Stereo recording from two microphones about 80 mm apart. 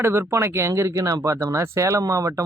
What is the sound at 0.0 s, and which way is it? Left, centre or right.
Speech, right.